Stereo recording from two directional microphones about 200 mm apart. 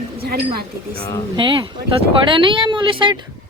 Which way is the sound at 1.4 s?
25° right (ahead or behind).